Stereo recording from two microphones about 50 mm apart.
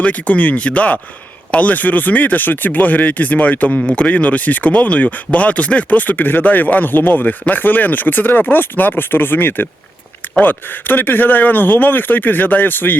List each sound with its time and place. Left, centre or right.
0.0 s speech: left